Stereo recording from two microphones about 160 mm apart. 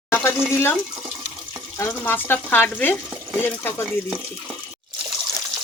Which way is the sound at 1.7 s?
15° left (ahead or behind).